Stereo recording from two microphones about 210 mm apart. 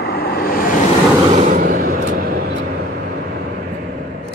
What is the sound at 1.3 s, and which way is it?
Vehicle, 40° right (ahead or behind).